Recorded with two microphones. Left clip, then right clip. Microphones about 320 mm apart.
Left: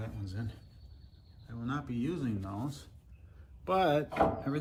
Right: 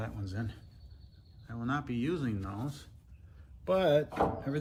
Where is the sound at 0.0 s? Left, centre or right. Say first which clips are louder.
Right 4 dB; centre.